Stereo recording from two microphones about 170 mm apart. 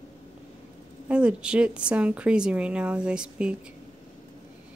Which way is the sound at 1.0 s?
5° right (ahead or behind).